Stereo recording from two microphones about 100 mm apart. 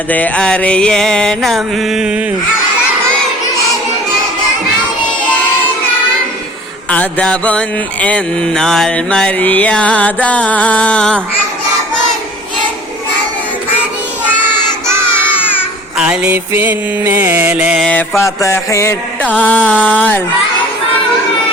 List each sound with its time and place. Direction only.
0.1 s mantra: 10° left (ahead or behind); by 2.2 s 10° right (ahead or behind)
6.9 s mantra: 10° left (ahead or behind)
16.0 s mantra: 15° right (ahead or behind)
17.5 s mantra: 15° right (ahead or behind)
18.2 s a sound: 30° left (ahead or behind)
19.4 s mantra: 15° left (ahead or behind)